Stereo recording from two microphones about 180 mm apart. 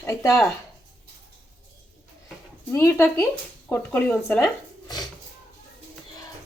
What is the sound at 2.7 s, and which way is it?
Speech, 15° left (ahead or behind).